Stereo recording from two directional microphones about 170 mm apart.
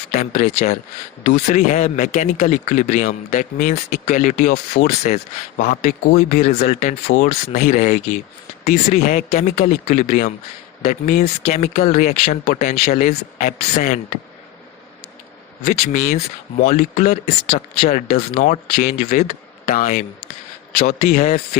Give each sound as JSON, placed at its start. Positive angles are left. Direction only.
{"t": 0.1, "sound": "speech", "side_deg": 45}
{"t": 8.6, "sound": "speech", "side_deg": 60}
{"t": 11.4, "sound": "speech", "side_deg": 40}
{"t": 12.5, "sound": "speech", "side_deg": 60}
{"t": 15.6, "sound": "speech", "side_deg": 50}